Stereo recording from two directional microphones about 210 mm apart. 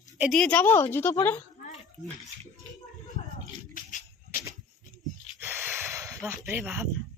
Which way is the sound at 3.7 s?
40° left (ahead or behind).